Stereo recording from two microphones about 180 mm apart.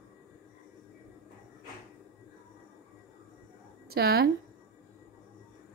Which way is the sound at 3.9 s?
60° right (ahead or behind).